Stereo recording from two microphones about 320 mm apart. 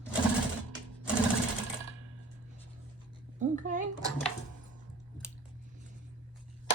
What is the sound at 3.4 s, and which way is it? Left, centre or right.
Speech, right.